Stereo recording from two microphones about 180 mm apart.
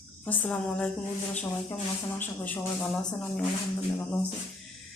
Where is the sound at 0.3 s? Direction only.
10° left (ahead or behind).